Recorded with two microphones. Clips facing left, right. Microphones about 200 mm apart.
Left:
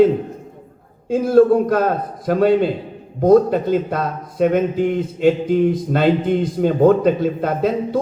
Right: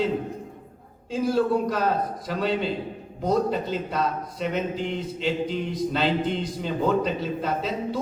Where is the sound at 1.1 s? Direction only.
55° left (ahead or behind).